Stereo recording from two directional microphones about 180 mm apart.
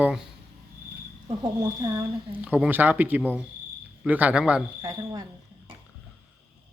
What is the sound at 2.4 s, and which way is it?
Speech, 10° right (ahead or behind).